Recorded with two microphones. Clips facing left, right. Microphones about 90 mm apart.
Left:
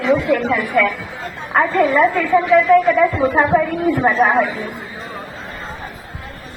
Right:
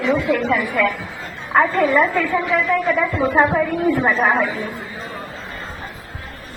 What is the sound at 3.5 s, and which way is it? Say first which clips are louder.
Speech: left 2 dB; 15° left (ahead or behind).